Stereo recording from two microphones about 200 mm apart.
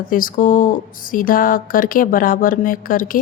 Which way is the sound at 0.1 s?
45° left (ahead or behind).